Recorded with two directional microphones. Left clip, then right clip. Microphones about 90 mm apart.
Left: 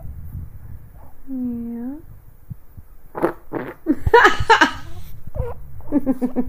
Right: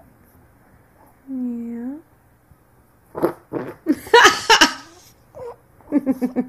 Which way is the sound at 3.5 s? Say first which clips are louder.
Even; 25° left (ahead or behind).